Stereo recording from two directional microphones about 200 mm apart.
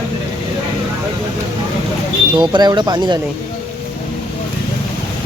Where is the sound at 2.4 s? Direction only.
20° right (ahead or behind).